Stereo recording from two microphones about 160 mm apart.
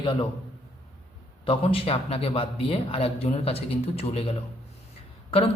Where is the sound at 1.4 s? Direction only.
35° left (ahead or behind).